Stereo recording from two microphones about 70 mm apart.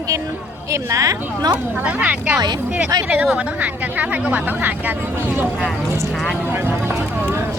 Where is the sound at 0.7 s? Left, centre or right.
Right.